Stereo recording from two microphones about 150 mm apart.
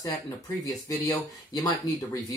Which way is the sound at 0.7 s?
25° left (ahead or behind).